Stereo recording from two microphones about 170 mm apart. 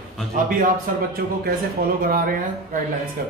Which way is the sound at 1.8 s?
70° right (ahead or behind).